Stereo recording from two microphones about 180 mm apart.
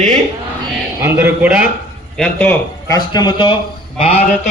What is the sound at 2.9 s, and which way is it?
A man's voice, 25° left (ahead or behind).